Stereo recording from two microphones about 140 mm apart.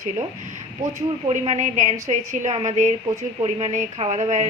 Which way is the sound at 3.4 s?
45° right (ahead or behind).